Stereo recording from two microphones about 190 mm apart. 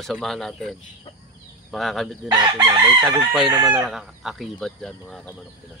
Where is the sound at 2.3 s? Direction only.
20° right (ahead or behind).